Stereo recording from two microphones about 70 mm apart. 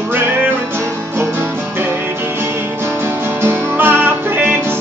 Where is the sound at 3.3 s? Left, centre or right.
Right.